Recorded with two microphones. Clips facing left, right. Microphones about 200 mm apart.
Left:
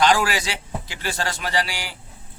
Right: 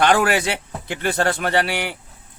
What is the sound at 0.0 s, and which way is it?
Speech, 60° right (ahead or behind).